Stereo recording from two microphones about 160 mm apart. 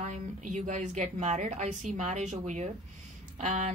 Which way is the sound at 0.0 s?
50° right (ahead or behind).